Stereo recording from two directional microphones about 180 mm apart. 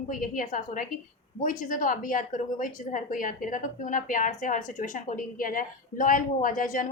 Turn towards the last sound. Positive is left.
turn(degrees=45)  # may be behind; listen again after turning